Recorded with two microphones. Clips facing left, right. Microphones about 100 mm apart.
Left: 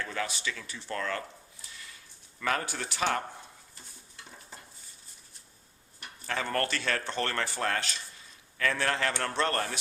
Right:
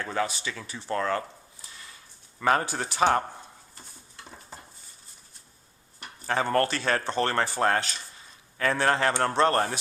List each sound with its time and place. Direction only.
0.0 s speech: 30° right (ahead or behind)
2.4 s speech: 30° right (ahead or behind)
4.3 s dishes: 35° right (ahead or behind)
6.0 s speech: 35° right (ahead or behind)